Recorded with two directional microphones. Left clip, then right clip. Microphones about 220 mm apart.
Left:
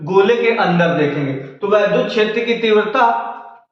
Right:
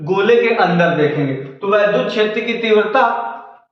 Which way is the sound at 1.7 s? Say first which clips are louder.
Even; 5° left (ahead or behind).